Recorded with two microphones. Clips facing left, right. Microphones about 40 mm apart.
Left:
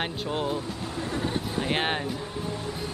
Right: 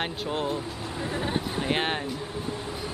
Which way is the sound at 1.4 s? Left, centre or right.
Centre.